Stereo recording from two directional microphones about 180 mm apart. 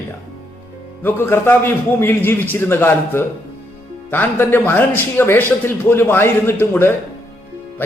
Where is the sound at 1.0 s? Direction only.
10° left (ahead or behind).